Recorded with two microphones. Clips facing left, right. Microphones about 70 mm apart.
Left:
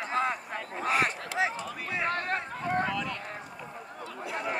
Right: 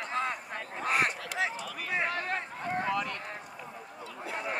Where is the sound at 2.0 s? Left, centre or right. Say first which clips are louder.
Left 3 dB; left.